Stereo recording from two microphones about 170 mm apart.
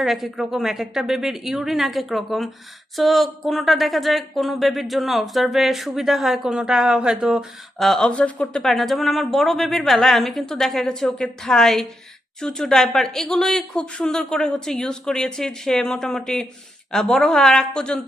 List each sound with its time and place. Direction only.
0.0 s speech: centre (ahead or behind)